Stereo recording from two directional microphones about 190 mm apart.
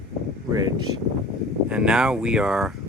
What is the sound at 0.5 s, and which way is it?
Speech, 20° right (ahead or behind).